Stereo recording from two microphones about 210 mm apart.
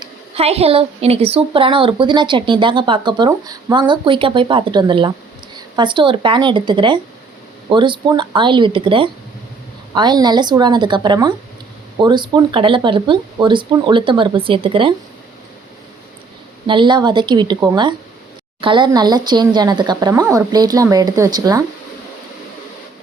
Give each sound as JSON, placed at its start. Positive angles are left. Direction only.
{"t": 0.0, "sound": "a woman's voice", "side_deg": -30}
{"t": 16.6, "sound": "a woman's voice", "side_deg": -20}